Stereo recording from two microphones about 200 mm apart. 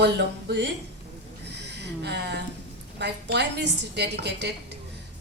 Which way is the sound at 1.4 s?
60° right (ahead or behind).